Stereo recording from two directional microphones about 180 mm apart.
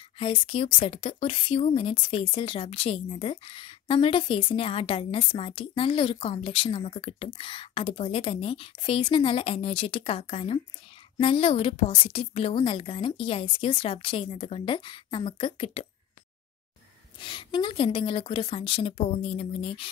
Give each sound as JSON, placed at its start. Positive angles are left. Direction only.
{"t": 0.2, "sound": "speech", "side_deg": 30}
{"t": 17.2, "sound": "speech", "side_deg": 25}